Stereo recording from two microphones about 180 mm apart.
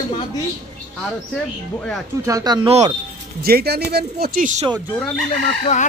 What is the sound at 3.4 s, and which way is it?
Speech, 60° right (ahead or behind).